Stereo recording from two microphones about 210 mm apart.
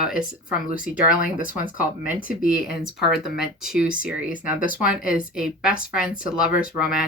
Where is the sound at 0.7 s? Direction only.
40° left (ahead or behind).